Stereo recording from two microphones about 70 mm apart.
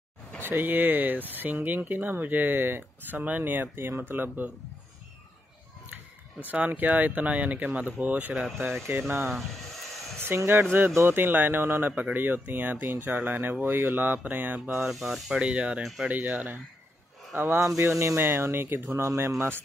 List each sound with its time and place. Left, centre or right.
0.4 s speech: right
6.4 s speech: right
10.1 s speech: right
14.9 s speech: centre; by 16.5 s right
17.3 s speech: right
18.9 s speech: right